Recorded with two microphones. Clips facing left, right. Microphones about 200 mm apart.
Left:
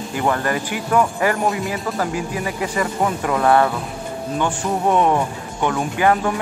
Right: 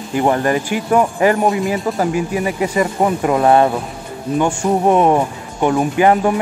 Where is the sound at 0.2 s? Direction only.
25° right (ahead or behind).